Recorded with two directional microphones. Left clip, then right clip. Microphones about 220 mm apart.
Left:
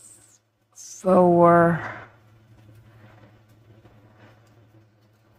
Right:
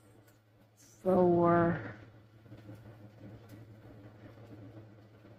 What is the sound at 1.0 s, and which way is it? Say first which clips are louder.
Speech: left 11 dB; 45° left (ahead or behind).